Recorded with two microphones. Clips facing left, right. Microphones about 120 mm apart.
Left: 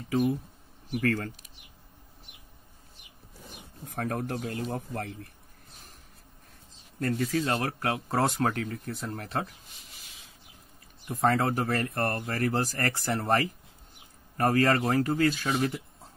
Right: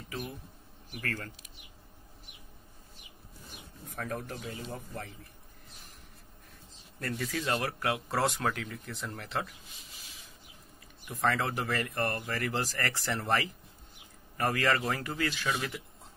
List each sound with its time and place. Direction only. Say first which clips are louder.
3.9 s speech: left 6 dB; 60° left (ahead or behind)
7.0 s speech: left 7 dB; 35° left (ahead or behind)
11.1 s speech: left 5 dB; 40° left (ahead or behind)